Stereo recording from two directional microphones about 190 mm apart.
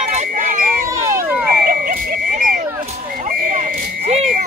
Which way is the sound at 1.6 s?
45° right (ahead or behind).